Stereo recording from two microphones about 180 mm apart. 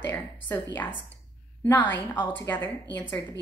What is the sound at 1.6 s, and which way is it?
A woman's voice, 10° left (ahead or behind).